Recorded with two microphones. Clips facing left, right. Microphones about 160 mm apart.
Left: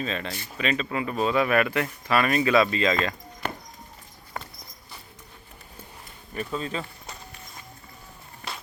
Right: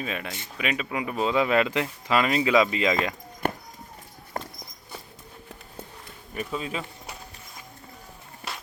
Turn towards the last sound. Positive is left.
turn(degrees=-10)  # may be behind; listen again after turning